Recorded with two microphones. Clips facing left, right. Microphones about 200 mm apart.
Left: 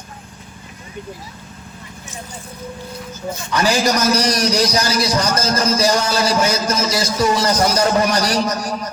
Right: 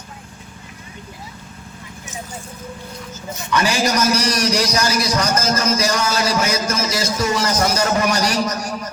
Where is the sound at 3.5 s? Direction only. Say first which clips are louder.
Left 1 dB; 35° left (ahead or behind).